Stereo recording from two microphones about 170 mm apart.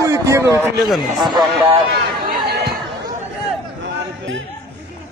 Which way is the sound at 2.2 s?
65° right (ahead or behind).